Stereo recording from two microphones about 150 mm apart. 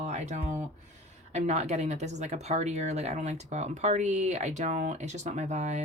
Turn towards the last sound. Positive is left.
turn(degrees=-50)  # may be behind; listen again after turning